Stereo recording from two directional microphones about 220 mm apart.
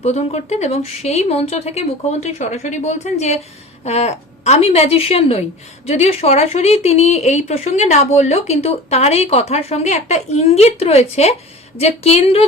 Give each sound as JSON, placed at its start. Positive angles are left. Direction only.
{"t": 0.0, "sound": "a woman's voice", "side_deg": 30}